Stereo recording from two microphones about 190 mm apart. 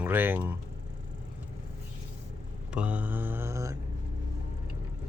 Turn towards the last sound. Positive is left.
turn(degrees=-15)  # may be behind; listen again after turning